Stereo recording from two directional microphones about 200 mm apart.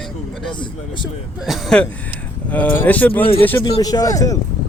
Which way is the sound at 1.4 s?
Centre (ahead or behind).